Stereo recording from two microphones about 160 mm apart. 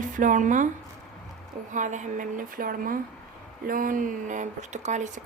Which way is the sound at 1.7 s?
50° right (ahead or behind).